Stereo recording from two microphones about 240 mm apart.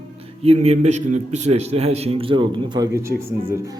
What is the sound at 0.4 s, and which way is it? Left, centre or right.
A man's voice, right.